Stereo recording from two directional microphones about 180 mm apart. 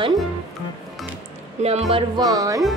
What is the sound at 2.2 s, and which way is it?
Speech, 20° right (ahead or behind).